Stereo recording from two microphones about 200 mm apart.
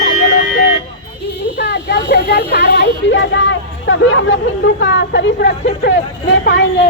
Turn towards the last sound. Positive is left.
turn(degrees=65)  # may be behind; listen again after turning